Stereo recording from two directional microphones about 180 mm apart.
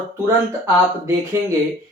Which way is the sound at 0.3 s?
15° right (ahead or behind).